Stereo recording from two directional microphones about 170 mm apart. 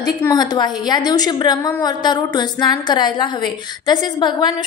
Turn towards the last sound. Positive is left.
turn(degrees=25)  # may be behind; listen again after turning